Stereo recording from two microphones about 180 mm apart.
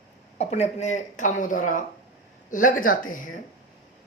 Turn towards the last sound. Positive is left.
turn(degrees=50)  # may be behind; listen again after turning